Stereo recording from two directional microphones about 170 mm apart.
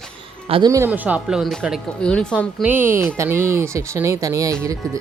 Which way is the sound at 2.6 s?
10° right (ahead or behind).